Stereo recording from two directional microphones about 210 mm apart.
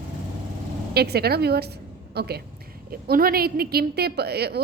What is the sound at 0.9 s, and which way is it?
A woman's voice, 50° right (ahead or behind).